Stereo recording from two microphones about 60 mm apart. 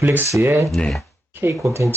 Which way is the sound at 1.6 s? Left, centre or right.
Right.